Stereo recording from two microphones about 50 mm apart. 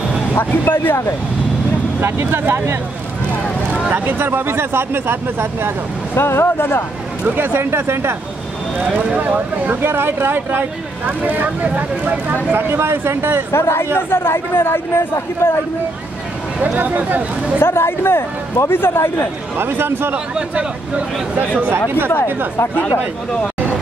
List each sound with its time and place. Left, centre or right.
0.3 s a man's voice: left
2.0 s speech: right
3.9 s speech: right
6.1 s speech: left
7.2 s speech: right
8.7 s speech: right
9.8 s speech: right
12.5 s speech: right
13.5 s a man's voice: left
16.7 s speech: right
17.6 s a man's voice: left
19.5 s speech: right
21.5 s speech: right